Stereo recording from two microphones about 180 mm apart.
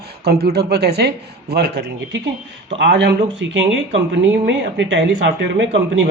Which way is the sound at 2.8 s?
85° right.